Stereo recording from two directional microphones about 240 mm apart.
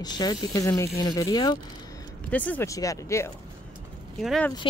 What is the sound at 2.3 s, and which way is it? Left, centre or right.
Speech, centre.